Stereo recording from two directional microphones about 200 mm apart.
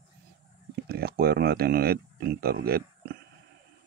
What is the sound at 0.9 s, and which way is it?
Speech, 50° right (ahead or behind).